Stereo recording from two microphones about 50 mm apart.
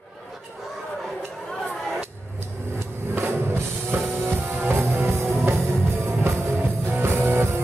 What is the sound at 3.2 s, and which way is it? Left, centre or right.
Music, right.